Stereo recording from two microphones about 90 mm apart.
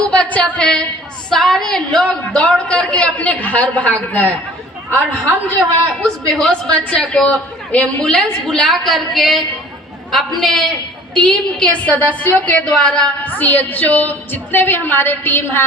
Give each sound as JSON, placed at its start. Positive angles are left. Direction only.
{"t": 0.0, "sound": "a sound", "side_deg": 15}
{"t": 1.3, "sound": "a man's voice", "side_deg": 5}
{"t": 6.0, "sound": "a man's voice", "side_deg": 10}
{"t": 10.4, "sound": "a woman's voice", "side_deg": 5}